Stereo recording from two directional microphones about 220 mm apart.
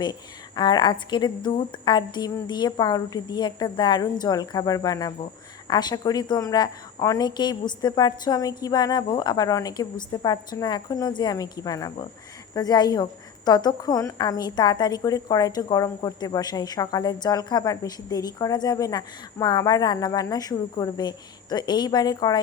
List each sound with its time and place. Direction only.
0.0 s a woman's voice: 20° left (ahead or behind)